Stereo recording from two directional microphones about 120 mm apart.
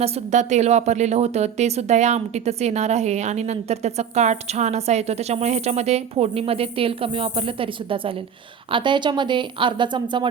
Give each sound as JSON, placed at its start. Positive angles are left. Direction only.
{"t": 0.0, "sound": "a woman's voice", "side_deg": -80}